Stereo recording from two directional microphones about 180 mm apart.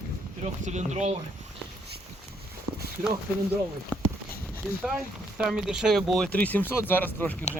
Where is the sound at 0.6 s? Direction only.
40° right (ahead or behind).